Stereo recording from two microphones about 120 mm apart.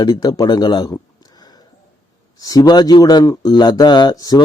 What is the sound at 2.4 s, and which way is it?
A man's voice, 30° left (ahead or behind).